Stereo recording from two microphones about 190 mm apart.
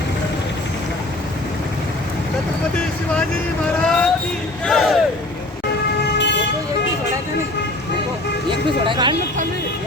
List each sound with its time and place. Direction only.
3.8 s vehicle: 5° left (ahead or behind)
4.6 s speech: 5° left (ahead or behind)
6.1 s vehicle: 65° left (ahead or behind)
8.8 s speech: 25° right (ahead or behind)